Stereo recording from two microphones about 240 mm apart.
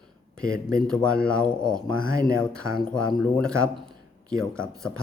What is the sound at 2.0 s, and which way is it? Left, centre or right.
Speech, left.